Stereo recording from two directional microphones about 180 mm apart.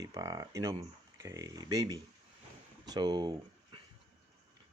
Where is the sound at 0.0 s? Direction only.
20° right (ahead or behind).